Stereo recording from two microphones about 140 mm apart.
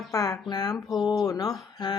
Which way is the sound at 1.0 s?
30° left (ahead or behind).